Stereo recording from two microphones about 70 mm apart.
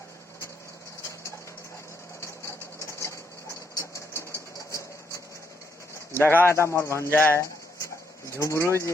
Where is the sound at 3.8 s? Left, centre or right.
Left.